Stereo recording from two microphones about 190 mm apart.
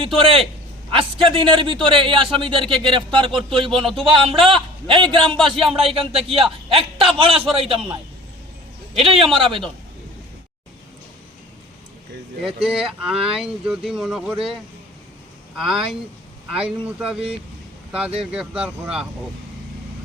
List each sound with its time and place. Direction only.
0.2 s a man's voice: 30° right (ahead or behind)
9.0 s a man's voice: 30° right (ahead or behind)
12.6 s speech: 5° right (ahead or behind)
15.5 s speech: centre (ahead or behind)